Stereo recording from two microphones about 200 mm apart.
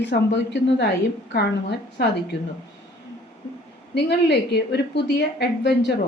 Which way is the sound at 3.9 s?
55° left (ahead or behind).